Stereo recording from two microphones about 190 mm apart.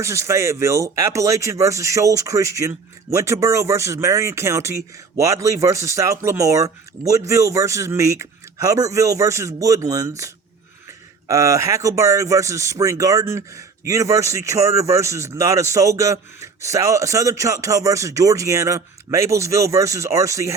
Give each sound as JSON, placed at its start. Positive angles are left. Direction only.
{"t": 0.0, "sound": "speech", "side_deg": -15}